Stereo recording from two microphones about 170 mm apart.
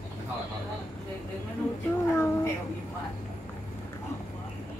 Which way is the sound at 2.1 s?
15° left (ahead or behind).